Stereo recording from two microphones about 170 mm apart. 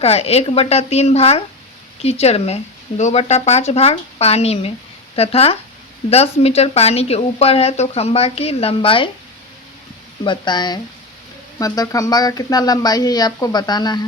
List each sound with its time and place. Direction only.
0.0 s speech: 35° left (ahead or behind)
10.2 s speech: 25° left (ahead or behind)